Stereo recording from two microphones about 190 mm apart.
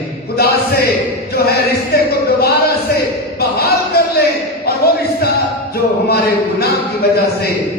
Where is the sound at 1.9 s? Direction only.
55° left (ahead or behind).